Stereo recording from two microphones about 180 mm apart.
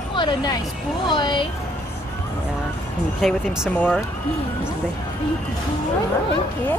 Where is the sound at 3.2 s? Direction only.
Centre (ahead or behind).